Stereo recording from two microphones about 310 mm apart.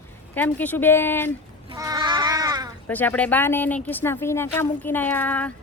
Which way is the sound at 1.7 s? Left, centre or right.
Centre.